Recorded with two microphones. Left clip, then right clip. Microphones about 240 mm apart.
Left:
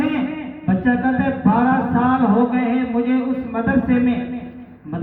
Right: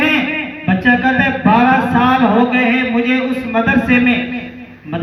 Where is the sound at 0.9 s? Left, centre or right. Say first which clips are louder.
Right 7 dB; right.